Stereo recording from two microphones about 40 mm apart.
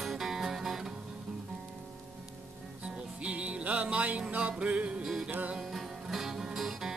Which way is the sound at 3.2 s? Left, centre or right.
Right.